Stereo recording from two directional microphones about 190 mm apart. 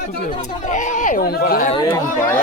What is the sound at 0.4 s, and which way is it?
Speech, 40° left (ahead or behind).